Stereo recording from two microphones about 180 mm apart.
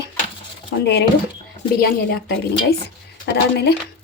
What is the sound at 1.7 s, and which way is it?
Speech, 60° left (ahead or behind).